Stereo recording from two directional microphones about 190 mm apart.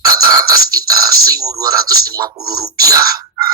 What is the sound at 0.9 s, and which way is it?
Speech, 20° right (ahead or behind).